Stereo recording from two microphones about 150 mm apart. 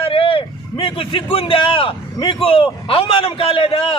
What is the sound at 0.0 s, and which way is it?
A man's voice, 35° left (ahead or behind).